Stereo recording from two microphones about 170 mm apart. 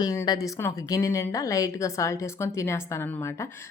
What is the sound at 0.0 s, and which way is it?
A woman's voice, 20° left (ahead or behind).